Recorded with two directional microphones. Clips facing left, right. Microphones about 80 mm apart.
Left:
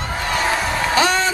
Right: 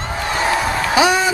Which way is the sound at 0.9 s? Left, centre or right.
Centre.